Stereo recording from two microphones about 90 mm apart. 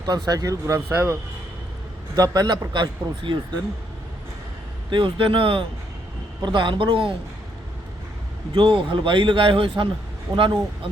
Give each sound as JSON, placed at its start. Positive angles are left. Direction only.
{"t": 0.0, "sound": "speech", "side_deg": -45}
{"t": 0.9, "sound": "speech", "side_deg": -25}
{"t": 2.1, "sound": "a man's voice", "side_deg": -45}
{"t": 4.9, "sound": "a man's voice", "side_deg": -65}
{"t": 6.4, "sound": "a man's voice", "side_deg": -65}
{"t": 8.5, "sound": "a man's voice", "side_deg": -70}